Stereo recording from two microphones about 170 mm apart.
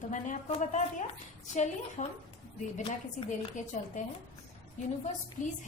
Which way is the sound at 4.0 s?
50° left (ahead or behind).